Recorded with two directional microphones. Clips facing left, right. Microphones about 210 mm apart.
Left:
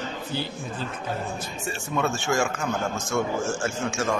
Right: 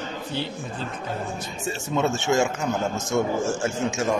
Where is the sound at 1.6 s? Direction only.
20° right (ahead or behind).